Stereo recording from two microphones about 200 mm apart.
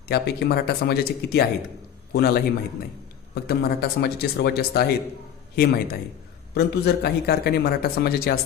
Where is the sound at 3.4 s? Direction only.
50° left (ahead or behind).